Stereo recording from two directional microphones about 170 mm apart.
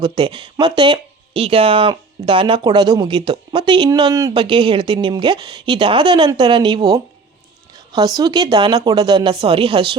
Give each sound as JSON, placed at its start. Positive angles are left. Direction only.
{"t": 0.0, "sound": "speech", "side_deg": -30}